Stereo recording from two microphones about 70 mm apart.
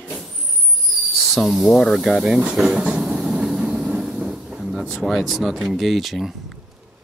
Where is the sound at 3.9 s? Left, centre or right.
Centre.